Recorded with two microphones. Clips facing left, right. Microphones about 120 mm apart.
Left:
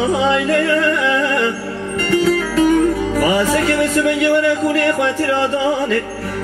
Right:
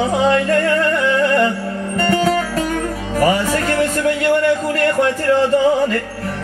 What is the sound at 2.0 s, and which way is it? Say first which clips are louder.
Music: left 1 dB; 45° right (ahead or behind).